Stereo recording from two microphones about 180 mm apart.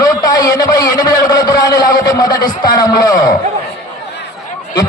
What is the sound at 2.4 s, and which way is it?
Speech, 20° left (ahead or behind).